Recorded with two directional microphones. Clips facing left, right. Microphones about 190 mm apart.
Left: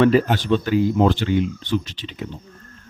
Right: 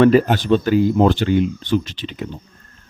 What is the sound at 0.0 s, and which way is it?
Speech, 50° right (ahead or behind).